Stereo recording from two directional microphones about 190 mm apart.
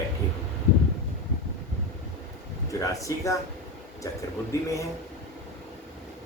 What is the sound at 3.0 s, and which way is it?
Speech, 15° left (ahead or behind).